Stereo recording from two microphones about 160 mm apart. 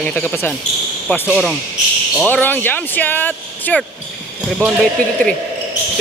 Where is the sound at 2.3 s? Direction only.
10° left (ahead or behind).